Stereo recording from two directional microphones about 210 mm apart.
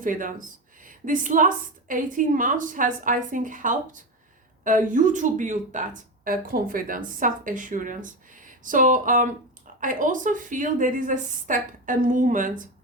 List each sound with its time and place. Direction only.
0.0 s speech: 40° right (ahead or behind)